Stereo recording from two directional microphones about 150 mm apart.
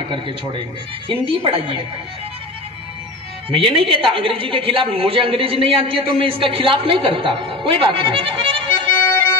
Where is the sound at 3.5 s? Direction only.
35° right (ahead or behind).